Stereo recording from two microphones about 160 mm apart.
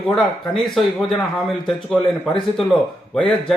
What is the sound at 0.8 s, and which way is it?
A man's voice, centre (ahead or behind).